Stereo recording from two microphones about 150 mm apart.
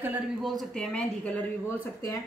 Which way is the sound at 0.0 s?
5° right (ahead or behind).